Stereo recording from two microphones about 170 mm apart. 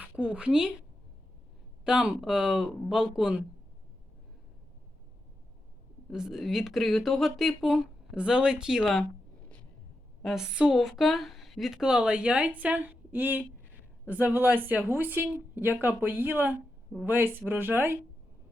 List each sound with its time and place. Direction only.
0.0 s a woman's voice: 10° right (ahead or behind)
1.8 s speech: 5° right (ahead or behind)
6.1 s speech: centre (ahead or behind)
10.2 s a woman's voice: centre (ahead or behind)